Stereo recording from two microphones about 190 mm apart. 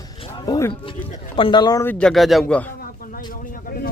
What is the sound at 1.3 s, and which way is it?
Speech, 25° left (ahead or behind).